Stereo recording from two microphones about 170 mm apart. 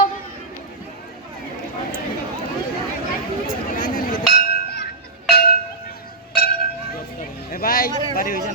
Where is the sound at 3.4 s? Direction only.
55° left (ahead or behind).